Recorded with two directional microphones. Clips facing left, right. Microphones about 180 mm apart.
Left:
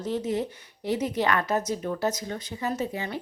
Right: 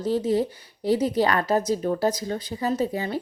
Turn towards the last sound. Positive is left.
turn(degrees=-35)  # may be behind; listen again after turning